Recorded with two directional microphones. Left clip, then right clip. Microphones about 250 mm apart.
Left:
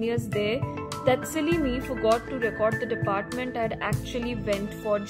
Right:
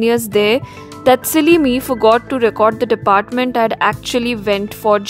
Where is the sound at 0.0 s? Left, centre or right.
Right.